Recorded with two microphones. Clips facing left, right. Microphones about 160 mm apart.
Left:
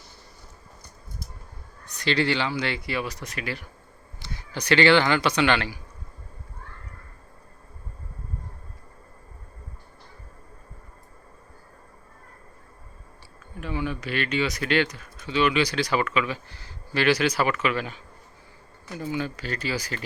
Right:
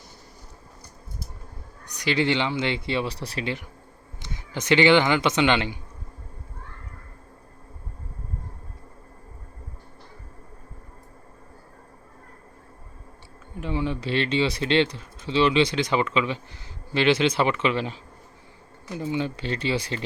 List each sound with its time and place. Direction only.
1.8 s speech: 15° right (ahead or behind)
13.6 s speech: 25° right (ahead or behind)